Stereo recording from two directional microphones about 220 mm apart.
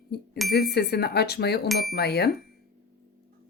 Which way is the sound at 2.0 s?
50° left (ahead or behind).